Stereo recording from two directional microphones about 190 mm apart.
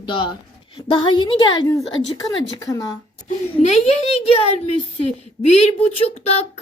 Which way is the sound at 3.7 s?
30° left (ahead or behind).